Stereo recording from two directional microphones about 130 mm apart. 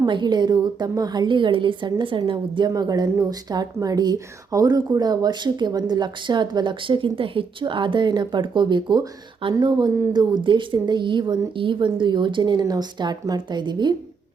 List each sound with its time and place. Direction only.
0.0 s speech: 35° right (ahead or behind)